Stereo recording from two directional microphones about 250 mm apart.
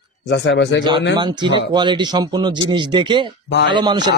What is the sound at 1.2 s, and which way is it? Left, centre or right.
Speech, centre.